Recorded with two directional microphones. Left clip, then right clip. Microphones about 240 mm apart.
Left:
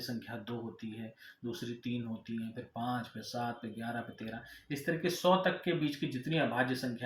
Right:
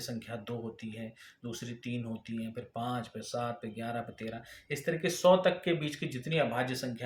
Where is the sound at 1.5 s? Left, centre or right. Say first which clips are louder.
Left 1 dB; right.